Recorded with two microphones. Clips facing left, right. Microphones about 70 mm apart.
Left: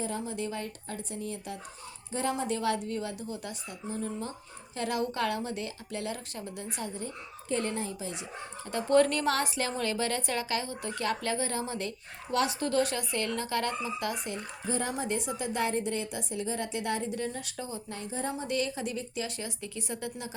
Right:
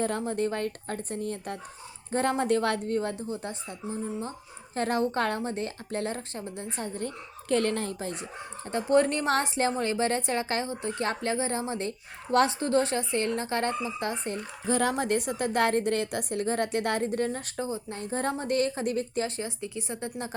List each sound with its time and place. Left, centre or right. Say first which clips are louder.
0.0 s speech: right 6 dB; right
3.2 s a woman's voice: right 4 dB; right
7.5 s a woman's voice: right 5 dB; right
8.7 s a woman's voice: right 1 dB; right
14.7 s a woman's voice: right 6 dB; right
17.6 s a woman's voice: right 7 dB; right
18.0 s speech: right 5 dB; right
19.4 s a woman's voice: right 4 dB; right